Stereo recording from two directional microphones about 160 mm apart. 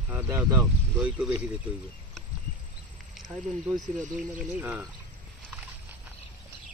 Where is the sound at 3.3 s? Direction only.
15° right (ahead or behind).